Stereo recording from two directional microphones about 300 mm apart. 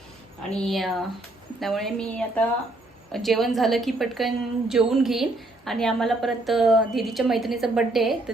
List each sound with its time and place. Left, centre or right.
0.6 s a woman's voice: centre